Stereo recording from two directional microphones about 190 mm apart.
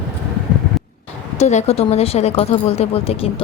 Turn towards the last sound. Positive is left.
turn(degrees=30)  # may be behind; listen again after turning